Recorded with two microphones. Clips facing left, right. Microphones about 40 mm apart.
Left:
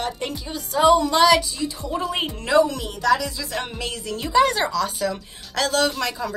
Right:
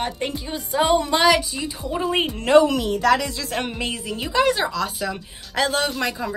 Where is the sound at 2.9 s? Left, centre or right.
Right.